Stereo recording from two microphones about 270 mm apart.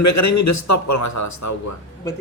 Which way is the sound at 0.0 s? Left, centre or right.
Left.